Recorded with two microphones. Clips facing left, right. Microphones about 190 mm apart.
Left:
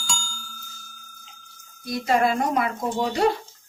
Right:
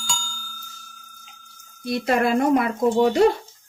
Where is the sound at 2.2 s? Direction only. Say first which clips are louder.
Right 5 dB; 55° right (ahead or behind).